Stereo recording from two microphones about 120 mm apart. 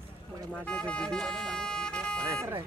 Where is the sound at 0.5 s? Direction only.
10° left (ahead or behind).